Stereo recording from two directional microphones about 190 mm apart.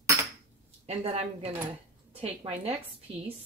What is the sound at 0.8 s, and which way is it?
A woman's voice, 35° right (ahead or behind).